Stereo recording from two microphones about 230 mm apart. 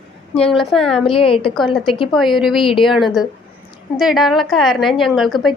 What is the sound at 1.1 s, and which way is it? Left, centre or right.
Speech, left.